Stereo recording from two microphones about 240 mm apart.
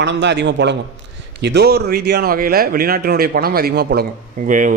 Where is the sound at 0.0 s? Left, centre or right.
Right.